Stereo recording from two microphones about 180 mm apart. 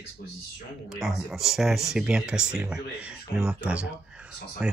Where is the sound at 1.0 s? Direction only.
Centre (ahead or behind).